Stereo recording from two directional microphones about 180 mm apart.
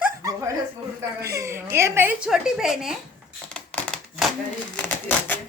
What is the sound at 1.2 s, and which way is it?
A woman's voice, 15° right (ahead or behind).